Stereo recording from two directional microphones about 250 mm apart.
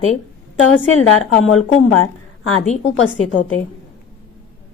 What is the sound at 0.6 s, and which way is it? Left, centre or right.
A woman's voice, left.